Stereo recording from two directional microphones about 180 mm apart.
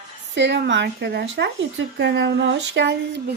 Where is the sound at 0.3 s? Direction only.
80° right.